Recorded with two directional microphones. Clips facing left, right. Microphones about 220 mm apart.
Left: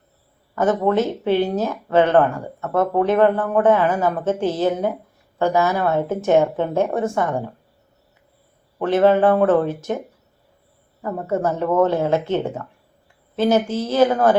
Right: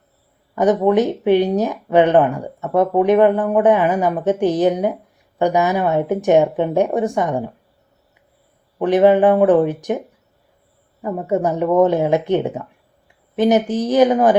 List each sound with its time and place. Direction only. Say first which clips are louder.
0.5 s speech: right 4 dB; 15° right (ahead or behind)
8.8 s speech: right 3 dB; 15° right (ahead or behind)
11.0 s speech: right 3 dB; 15° right (ahead or behind)